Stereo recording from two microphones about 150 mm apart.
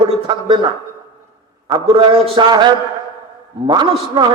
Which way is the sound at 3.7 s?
30° right (ahead or behind).